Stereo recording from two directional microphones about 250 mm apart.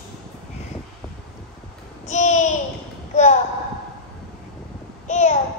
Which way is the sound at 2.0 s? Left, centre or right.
Left.